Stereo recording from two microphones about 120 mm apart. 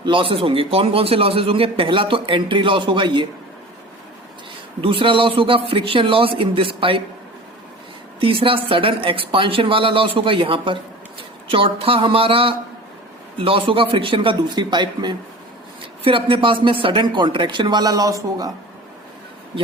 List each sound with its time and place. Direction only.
0.0 s a man's voice: 45° right (ahead or behind)
4.8 s a man's voice: 45° right (ahead or behind)
8.2 s a man's voice: 50° right (ahead or behind); by 18.5 s 30° right (ahead or behind)